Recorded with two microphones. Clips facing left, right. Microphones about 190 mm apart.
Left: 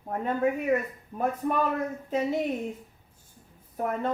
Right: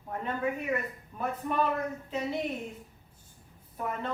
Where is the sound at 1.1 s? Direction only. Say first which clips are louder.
Left 6 dB; 45° left (ahead or behind).